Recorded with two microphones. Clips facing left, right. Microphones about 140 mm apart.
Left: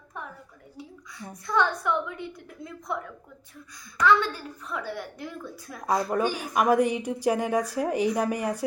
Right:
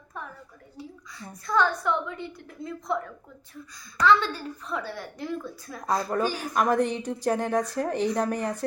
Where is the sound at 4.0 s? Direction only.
10° left (ahead or behind).